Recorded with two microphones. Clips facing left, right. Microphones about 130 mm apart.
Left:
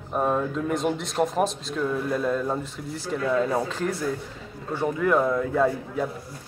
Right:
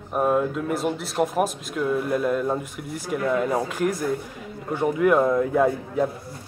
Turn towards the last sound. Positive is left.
turn(degrees=-15)  # may be behind; listen again after turning